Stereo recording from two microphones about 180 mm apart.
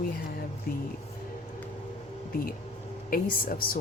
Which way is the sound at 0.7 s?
55° left (ahead or behind).